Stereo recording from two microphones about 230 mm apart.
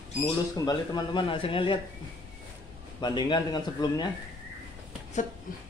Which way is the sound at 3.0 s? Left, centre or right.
Centre.